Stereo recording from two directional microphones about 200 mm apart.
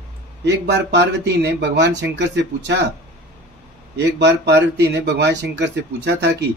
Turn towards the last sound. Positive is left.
turn(degrees=-60)  # may be behind; listen again after turning